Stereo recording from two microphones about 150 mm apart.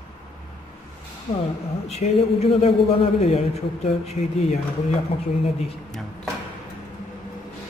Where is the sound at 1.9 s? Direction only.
45° left (ahead or behind).